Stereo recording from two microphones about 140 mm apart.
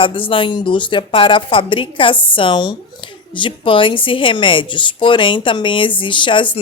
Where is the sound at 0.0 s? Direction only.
40° left (ahead or behind).